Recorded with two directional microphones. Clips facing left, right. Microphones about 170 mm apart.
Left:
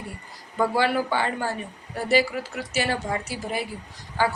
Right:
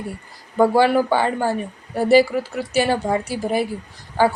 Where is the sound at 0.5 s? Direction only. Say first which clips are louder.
Right 7 dB; 50° right (ahead or behind).